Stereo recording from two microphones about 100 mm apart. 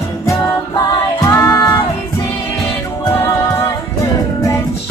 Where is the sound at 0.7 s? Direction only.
45° left (ahead or behind).